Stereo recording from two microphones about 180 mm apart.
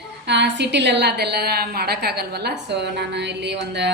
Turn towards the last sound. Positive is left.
turn(degrees=-70)  # may be behind; listen again after turning